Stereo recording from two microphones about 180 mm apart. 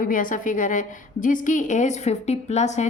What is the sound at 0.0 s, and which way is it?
A woman's voice, 50° left (ahead or behind).